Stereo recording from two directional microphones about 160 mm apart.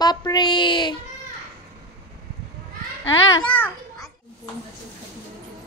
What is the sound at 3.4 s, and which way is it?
Speech, 10° left (ahead or behind).